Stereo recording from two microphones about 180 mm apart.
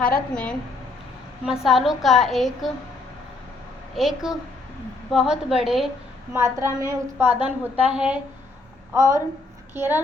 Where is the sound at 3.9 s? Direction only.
Centre (ahead or behind).